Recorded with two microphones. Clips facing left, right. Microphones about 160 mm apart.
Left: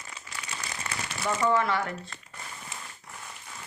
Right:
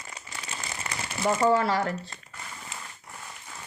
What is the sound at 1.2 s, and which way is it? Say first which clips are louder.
Speech: right 3 dB; 35° right (ahead or behind).